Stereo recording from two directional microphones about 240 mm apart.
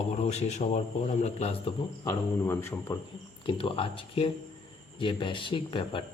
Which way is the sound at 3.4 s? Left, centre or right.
Left.